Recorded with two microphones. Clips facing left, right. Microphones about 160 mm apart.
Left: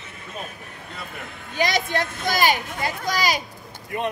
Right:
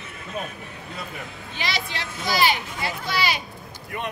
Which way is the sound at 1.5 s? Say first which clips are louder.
Left 8 dB; 45° left (ahead or behind).